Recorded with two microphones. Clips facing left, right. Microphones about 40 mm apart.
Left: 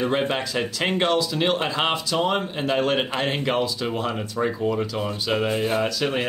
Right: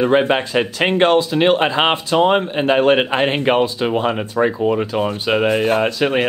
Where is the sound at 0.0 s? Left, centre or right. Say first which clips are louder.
Right 8 dB; right.